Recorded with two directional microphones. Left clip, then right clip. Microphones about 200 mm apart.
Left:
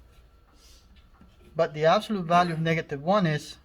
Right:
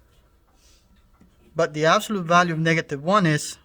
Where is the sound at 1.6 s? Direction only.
35° right (ahead or behind).